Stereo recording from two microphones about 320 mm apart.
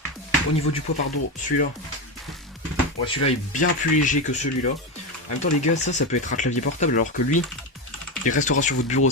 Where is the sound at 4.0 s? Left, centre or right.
Left.